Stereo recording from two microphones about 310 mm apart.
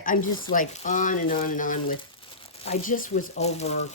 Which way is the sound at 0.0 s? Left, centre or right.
Left.